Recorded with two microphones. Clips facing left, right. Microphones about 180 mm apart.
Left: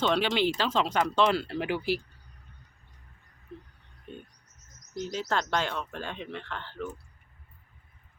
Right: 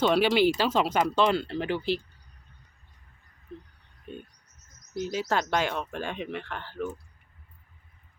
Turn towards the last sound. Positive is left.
turn(degrees=-15)  # may be behind; listen again after turning